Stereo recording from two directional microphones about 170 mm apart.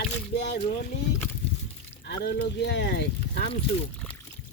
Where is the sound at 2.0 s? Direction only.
70° left (ahead or behind).